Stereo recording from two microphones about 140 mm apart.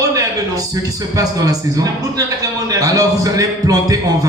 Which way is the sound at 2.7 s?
25° right (ahead or behind).